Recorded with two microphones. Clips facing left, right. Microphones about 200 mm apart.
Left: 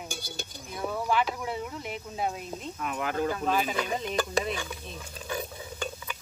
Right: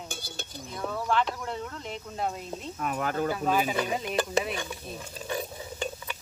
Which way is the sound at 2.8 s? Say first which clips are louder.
Right 2 dB; 45° right (ahead or behind).